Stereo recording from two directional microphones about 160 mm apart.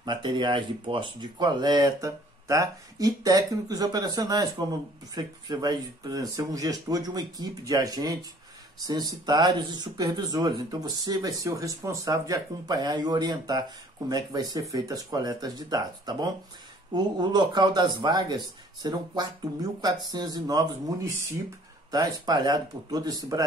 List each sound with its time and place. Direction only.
0.0 s speech: 30° right (ahead or behind)